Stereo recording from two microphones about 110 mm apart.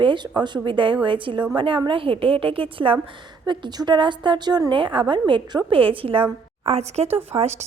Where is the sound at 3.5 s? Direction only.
45° right (ahead or behind).